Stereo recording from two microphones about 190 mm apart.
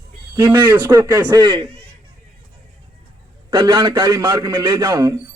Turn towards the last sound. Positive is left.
turn(degrees=-25)  # may be behind; listen again after turning